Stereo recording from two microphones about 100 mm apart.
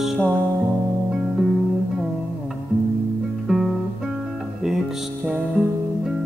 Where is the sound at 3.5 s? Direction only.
5° right (ahead or behind).